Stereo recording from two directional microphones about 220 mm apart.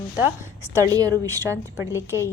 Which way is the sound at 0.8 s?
15° right (ahead or behind).